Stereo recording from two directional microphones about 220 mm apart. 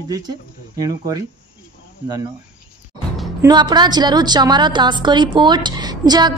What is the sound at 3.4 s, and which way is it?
A woman's voice, 20° right (ahead or behind).